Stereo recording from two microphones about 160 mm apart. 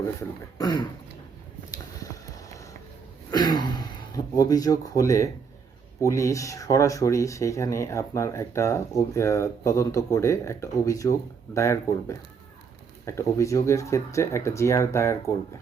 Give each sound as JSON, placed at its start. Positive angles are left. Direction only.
{"t": 0.0, "sound": "speech", "side_deg": 20}
{"t": 1.7, "sound": "a sound", "side_deg": 20}
{"t": 3.3, "sound": "speech", "side_deg": 25}